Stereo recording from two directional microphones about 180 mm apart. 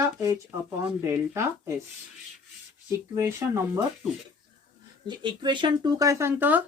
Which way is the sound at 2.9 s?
15° right (ahead or behind).